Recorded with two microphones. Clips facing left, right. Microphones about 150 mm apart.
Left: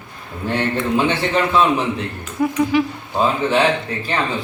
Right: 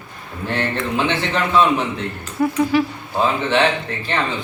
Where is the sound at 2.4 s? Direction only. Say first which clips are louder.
Even; 10° left (ahead or behind).